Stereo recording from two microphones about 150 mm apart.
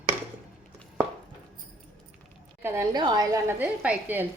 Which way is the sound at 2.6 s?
15° right (ahead or behind).